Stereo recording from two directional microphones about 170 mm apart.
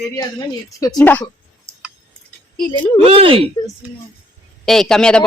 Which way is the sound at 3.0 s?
35° right (ahead or behind).